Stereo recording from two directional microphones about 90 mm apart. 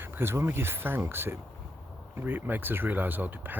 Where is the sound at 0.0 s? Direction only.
25° right (ahead or behind).